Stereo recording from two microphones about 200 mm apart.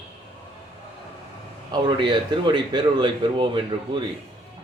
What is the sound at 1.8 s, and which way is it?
Speech, 25° right (ahead or behind).